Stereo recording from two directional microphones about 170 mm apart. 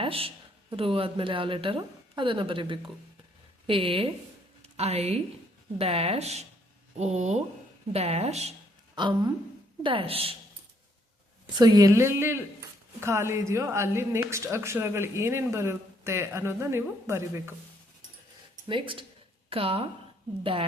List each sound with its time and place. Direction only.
0.0 s a woman's voice: 35° right (ahead or behind)
9.0 s a woman's voice: 25° right (ahead or behind)
11.5 s a woman's voice: 25° right (ahead or behind)
18.7 s a woman's voice: 30° right (ahead or behind)